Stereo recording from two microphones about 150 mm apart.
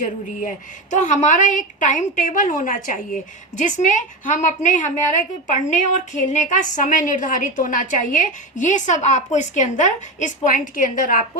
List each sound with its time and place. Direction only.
0.0 s a woman's voice: 55° left (ahead or behind)